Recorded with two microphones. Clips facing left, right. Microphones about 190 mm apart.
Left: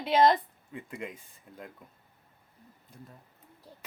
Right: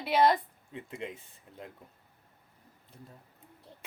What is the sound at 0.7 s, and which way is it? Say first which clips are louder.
Speech: even; 25° right (ahead or behind).